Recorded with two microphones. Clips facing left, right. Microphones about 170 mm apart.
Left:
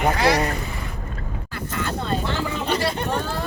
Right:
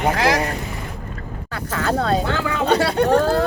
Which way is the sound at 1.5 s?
80° right.